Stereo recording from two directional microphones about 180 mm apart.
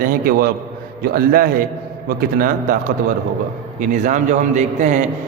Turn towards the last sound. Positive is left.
turn(degrees=-40)  # may be behind; listen again after turning